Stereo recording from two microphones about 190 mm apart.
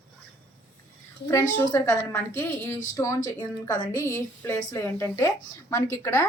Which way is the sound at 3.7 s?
45° left (ahead or behind).